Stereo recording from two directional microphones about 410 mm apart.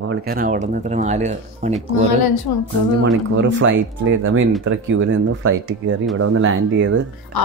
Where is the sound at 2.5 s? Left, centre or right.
Left.